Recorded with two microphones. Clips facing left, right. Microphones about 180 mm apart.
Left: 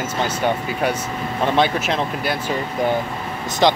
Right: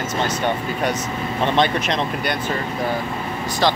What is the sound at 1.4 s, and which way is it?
Speech, 10° left (ahead or behind).